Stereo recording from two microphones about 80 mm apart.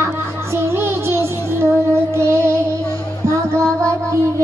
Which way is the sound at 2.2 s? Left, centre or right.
Right.